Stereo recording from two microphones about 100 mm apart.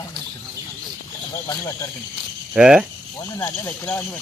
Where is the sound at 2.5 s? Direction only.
5° right (ahead or behind).